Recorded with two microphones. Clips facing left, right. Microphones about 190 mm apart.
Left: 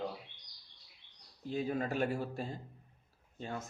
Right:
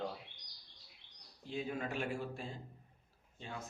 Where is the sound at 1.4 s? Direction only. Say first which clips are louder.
Left 5 dB; 40° left (ahead or behind).